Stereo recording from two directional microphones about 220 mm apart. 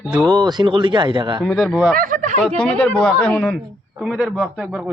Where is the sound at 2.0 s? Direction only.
35° right (ahead or behind).